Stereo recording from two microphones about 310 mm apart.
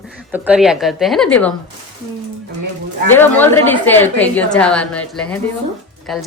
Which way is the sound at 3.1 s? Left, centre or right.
Centre.